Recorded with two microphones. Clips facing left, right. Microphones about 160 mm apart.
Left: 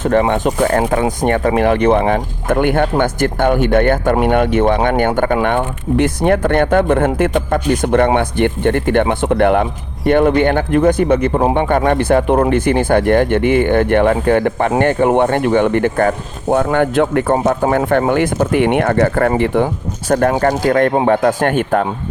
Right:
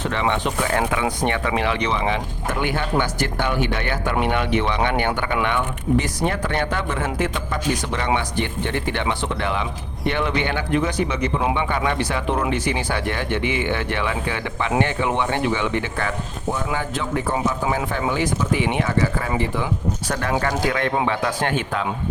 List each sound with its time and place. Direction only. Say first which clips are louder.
0.0 s speech: left 9 dB; 45° left (ahead or behind)